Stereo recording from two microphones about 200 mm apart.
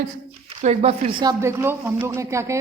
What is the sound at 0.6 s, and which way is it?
Speech, 30° right (ahead or behind).